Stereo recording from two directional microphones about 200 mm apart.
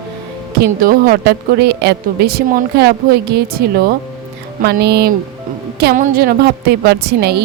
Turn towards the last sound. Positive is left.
turn(degrees=-55)  # may be behind; listen again after turning